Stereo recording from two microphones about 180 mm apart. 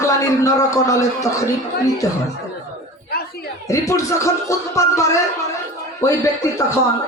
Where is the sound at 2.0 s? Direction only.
15° left (ahead or behind).